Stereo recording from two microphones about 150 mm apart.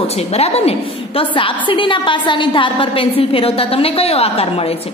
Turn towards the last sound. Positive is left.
turn(degrees=40)  # may be behind; listen again after turning